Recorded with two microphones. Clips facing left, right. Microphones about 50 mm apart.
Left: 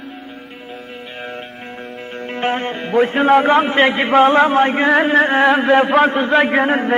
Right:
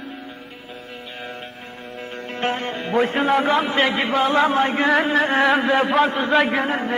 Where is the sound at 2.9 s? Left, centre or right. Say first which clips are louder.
Left 4 dB; centre.